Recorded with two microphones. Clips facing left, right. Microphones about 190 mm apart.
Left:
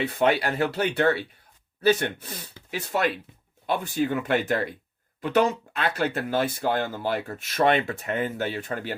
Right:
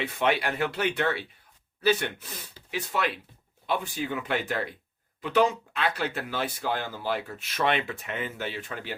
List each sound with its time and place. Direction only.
0.0 s speech: 35° left (ahead or behind)